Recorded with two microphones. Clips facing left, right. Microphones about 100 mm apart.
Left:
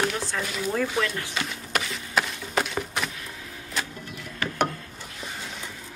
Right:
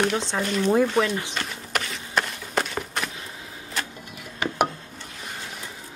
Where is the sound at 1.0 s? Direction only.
20° right (ahead or behind).